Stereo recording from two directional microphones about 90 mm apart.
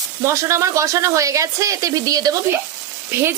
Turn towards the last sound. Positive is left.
turn(degrees=-25)  # may be behind; listen again after turning